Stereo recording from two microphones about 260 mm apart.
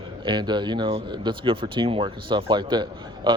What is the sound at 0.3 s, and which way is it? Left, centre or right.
Speech, centre.